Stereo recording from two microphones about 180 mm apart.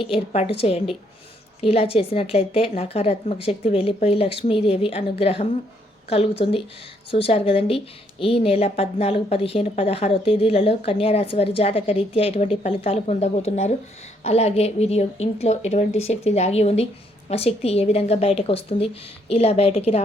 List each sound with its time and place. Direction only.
0.0 s a woman's voice: 30° left (ahead or behind)